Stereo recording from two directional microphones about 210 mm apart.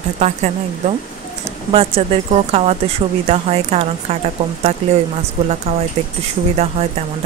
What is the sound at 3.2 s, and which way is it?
Speech, 30° right (ahead or behind).